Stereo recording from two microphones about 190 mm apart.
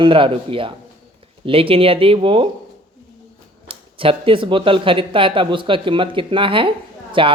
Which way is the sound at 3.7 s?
30° right (ahead or behind).